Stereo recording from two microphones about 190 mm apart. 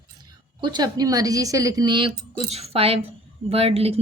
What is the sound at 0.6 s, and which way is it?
Speech, 20° right (ahead or behind).